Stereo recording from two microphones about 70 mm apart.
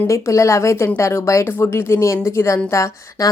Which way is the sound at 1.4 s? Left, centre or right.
Left.